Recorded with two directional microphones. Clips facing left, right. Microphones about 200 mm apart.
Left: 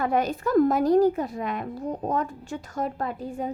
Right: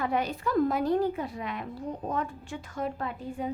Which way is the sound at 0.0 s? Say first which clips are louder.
Left 5 dB; 45° left (ahead or behind).